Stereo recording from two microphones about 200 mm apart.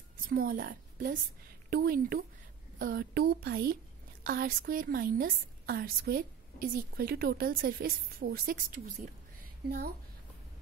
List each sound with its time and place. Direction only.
0.3 s a woman's voice: 45° right (ahead or behind)